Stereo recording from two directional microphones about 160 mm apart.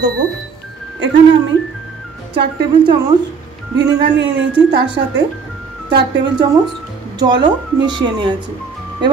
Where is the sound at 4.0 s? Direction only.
90° right.